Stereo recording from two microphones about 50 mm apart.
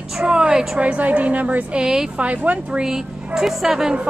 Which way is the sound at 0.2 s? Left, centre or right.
Centre.